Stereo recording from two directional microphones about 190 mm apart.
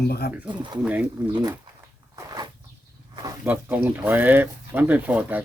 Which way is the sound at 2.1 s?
15° right (ahead or behind).